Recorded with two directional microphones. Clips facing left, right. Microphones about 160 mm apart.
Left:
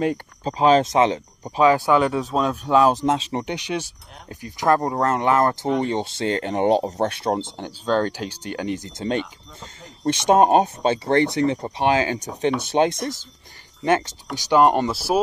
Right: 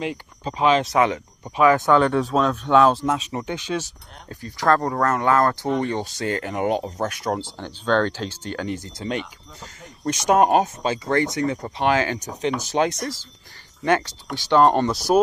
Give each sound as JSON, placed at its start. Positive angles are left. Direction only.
{"t": 0.0, "sound": "speech", "side_deg": 40}
{"t": 0.9, "sound": "speech", "side_deg": 25}
{"t": 1.8, "sound": "speech", "side_deg": 10}
{"t": 2.9, "sound": "speech", "side_deg": 15}
{"t": 3.2, "sound": "speech", "side_deg": 30}
{"t": 3.5, "sound": "speech", "side_deg": 15}
{"t": 7.8, "sound": "speech", "side_deg": 10}
{"t": 10.0, "sound": "speech", "side_deg": 25}